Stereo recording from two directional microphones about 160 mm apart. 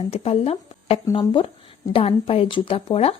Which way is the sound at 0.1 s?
40° left (ahead or behind).